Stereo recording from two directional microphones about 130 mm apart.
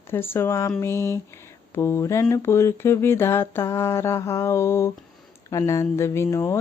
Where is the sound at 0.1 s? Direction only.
15° left (ahead or behind).